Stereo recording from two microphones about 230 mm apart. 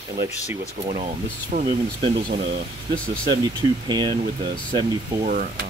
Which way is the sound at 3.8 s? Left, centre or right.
Centre.